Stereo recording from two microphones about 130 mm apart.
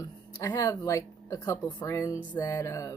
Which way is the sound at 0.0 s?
30° left (ahead or behind).